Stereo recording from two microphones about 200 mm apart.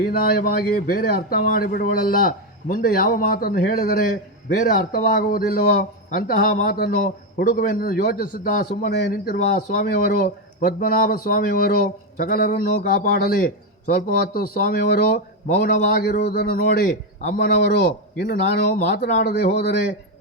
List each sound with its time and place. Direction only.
0.1 s a man's voice: 50° left (ahead or behind)
17.5 s a man's voice: 55° left (ahead or behind)